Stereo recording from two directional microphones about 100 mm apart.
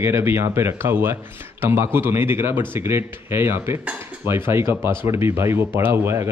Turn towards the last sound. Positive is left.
turn(degrees=-25)  # may be behind; listen again after turning